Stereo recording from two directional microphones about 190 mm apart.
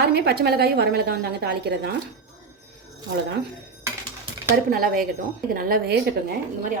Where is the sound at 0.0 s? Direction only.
55° right (ahead or behind).